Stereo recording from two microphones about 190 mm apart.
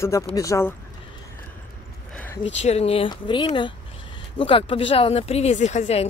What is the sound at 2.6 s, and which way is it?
Speech, 35° left (ahead or behind).